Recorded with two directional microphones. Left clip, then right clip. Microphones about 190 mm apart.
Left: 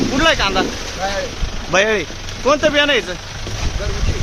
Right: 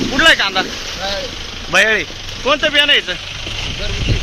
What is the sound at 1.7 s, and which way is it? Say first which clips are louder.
Speech: right 2 dB; 15° left (ahead or behind).